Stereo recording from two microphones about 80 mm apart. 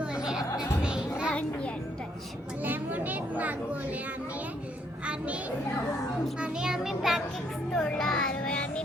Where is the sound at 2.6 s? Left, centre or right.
Right.